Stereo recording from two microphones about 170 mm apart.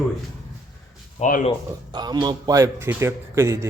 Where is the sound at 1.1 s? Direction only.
50° left (ahead or behind).